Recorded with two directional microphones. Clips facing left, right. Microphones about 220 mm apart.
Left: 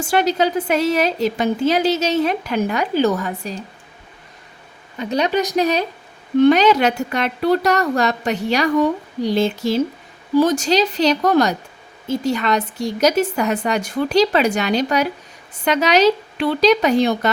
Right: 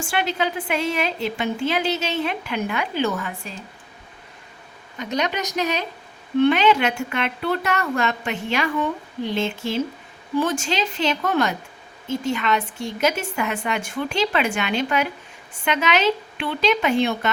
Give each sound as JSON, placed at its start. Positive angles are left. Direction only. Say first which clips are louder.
{"t": 0.1, "sound": "a woman's voice", "louder": "left 7 dB", "side_deg": 40}
{"t": 4.9, "sound": "a woman's voice", "louder": "left 6 dB", "side_deg": 30}